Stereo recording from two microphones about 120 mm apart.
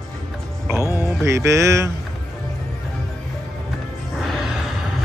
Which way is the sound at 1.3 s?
25° right (ahead or behind).